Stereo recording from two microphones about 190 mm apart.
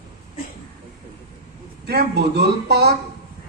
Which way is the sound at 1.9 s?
60° right (ahead or behind).